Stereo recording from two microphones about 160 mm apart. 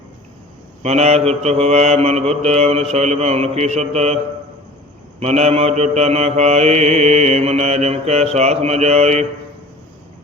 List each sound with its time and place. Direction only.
0.8 s mantra: 40° right (ahead or behind)
5.2 s mantra: 40° right (ahead or behind)